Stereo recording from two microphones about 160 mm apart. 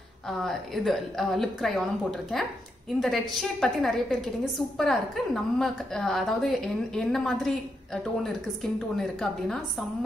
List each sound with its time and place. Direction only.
0.4 s a woman's voice: centre (ahead or behind)